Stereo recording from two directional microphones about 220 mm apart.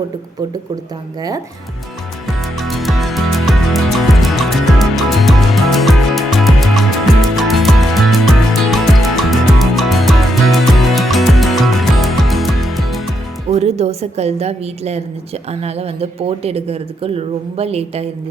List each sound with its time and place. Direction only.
2.6 s music: centre (ahead or behind)
13.5 s speech: 30° right (ahead or behind)